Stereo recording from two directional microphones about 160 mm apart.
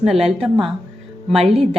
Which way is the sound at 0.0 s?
Centre (ahead or behind).